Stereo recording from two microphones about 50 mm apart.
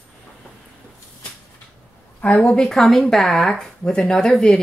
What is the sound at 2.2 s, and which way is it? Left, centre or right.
Speech, left.